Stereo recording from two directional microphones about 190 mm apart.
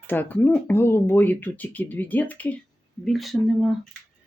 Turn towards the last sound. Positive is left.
turn(degrees=0)  # may be behind; listen again after turning